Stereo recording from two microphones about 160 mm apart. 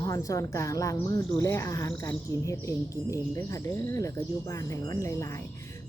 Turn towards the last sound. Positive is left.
turn(degrees=20)  # may be behind; listen again after turning